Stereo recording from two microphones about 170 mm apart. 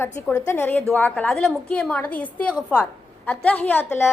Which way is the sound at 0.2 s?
15° left (ahead or behind).